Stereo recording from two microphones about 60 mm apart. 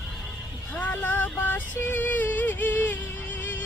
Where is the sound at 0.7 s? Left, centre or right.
Left.